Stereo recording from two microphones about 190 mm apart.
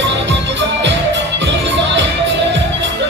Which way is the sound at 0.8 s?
70° right (ahead or behind).